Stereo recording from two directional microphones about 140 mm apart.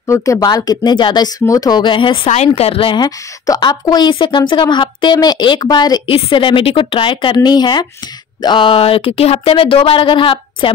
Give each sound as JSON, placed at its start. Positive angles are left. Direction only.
{"t": 0.0, "sound": "a woman's voice", "side_deg": 20}
{"t": 2.2, "sound": "a woman's voice", "side_deg": 55}